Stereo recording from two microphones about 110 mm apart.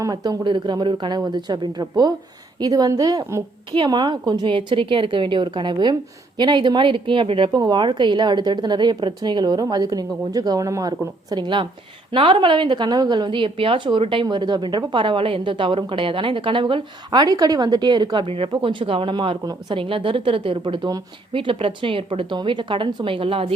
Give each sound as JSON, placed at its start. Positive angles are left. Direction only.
{"t": 0.0, "sound": "a woman's voice", "side_deg": -35}
{"t": 7.5, "sound": "a woman's voice", "side_deg": -40}
{"t": 18.3, "sound": "a woman's voice", "side_deg": -55}